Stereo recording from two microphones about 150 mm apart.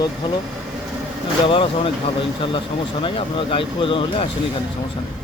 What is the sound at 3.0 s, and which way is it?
Speech, 35° left (ahead or behind).